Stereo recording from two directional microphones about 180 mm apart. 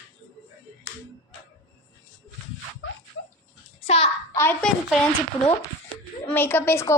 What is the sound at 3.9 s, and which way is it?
Speech, 30° left (ahead or behind).